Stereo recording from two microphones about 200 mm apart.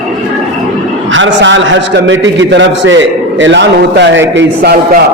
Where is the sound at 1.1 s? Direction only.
70° right (ahead or behind).